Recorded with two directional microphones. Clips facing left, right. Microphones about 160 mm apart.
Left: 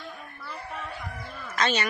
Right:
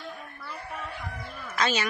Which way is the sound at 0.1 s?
Centre (ahead or behind).